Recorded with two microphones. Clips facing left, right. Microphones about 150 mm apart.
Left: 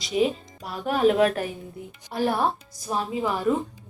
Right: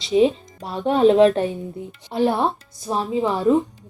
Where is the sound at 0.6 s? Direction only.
25° right (ahead or behind).